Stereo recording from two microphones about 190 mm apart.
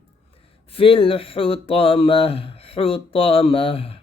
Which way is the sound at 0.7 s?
30° left (ahead or behind).